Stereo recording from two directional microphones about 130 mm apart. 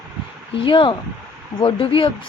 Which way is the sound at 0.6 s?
40° left (ahead or behind).